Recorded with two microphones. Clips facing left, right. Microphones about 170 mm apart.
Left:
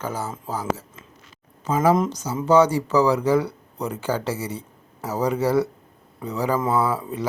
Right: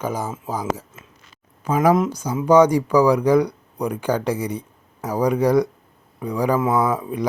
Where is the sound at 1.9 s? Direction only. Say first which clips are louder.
Right 2 dB; 5° right (ahead or behind).